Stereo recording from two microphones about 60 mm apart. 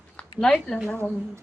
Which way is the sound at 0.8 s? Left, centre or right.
Left.